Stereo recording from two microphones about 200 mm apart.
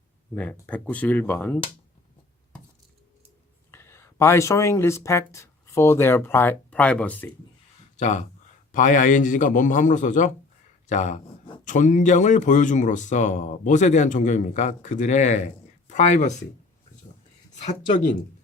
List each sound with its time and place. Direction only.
0.6 s speech: 5° left (ahead or behind)
3.7 s speech: 10° left (ahead or behind)
7.9 s speech: 35° left (ahead or behind)
17.5 s speech: 35° left (ahead or behind)